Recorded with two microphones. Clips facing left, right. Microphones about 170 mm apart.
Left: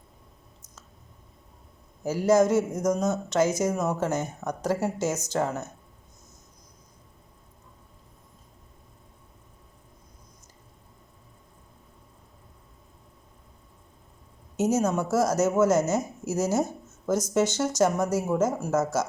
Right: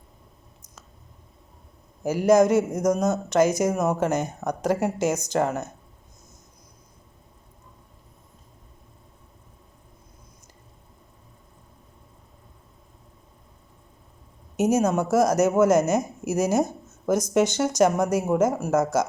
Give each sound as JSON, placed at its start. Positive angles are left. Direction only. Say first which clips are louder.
{"t": 2.0, "sound": "speech", "louder": "right 3 dB", "side_deg": -15}
{"t": 14.5, "sound": "a woman's voice", "louder": "right 3 dB", "side_deg": -10}